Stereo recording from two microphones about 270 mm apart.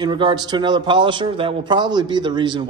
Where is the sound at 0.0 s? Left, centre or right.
Centre.